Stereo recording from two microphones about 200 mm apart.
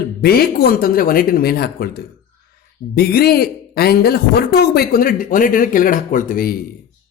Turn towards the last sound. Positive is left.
turn(degrees=45)  # may be behind; listen again after turning